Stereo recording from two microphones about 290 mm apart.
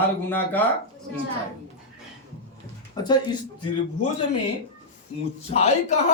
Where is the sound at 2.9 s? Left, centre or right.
Centre.